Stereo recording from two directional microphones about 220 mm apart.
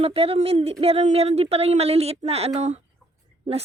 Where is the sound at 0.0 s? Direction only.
25° right (ahead or behind).